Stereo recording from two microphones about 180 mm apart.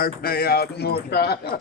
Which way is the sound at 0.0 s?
55° left (ahead or behind).